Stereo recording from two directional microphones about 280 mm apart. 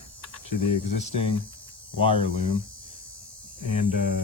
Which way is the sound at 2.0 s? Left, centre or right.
Centre.